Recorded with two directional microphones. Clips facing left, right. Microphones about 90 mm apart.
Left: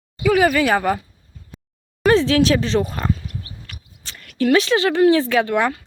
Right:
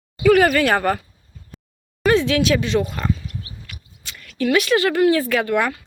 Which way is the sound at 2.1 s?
35° left (ahead or behind).